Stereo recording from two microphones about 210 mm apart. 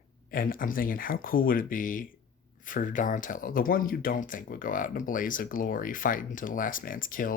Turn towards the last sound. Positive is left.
turn(degrees=40)  # may be behind; listen again after turning